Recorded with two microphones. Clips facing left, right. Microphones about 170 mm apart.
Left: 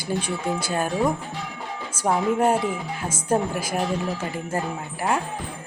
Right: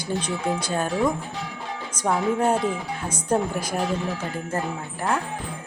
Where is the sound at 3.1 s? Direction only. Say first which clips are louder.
Even; 5° left (ahead or behind).